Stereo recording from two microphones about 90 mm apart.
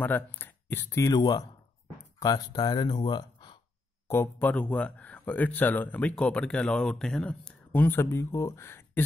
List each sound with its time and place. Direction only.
0.0 s speech: 20° left (ahead or behind)
1.0 s speech: 45° left (ahead or behind)
4.1 s speech: 20° left (ahead or behind)